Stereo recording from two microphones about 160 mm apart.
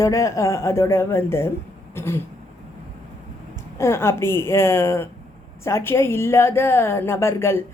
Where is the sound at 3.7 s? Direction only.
15° left (ahead or behind).